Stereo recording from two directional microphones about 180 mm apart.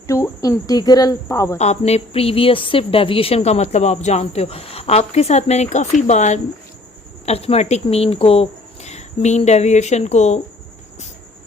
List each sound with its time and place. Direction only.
0.1 s speech: 15° left (ahead or behind)
1.5 s speech: 40° left (ahead or behind)